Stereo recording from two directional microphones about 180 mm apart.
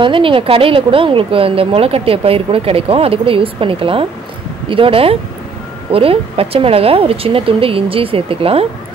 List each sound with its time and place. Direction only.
0.0 s a woman's voice: 30° right (ahead or behind)